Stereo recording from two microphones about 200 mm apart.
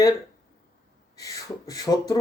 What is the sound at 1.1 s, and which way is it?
Speech, 15° left (ahead or behind).